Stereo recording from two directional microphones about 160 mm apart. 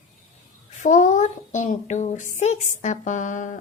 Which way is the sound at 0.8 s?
50° left (ahead or behind).